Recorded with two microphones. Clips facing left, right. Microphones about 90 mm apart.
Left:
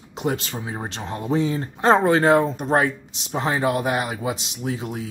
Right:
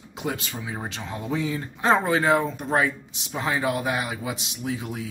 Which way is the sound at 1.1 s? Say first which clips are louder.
Left 5 dB; 35° left (ahead or behind).